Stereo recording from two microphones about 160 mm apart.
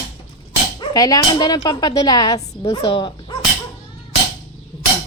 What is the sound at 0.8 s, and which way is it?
Speech, 20° left (ahead or behind).